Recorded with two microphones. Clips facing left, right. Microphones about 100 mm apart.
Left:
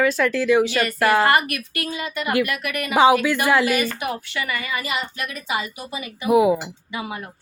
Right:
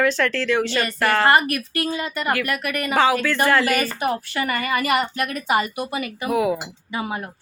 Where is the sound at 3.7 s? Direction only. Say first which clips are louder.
Right 1 dB; 40° right (ahead or behind); by 6.1 s 55° right (ahead or behind).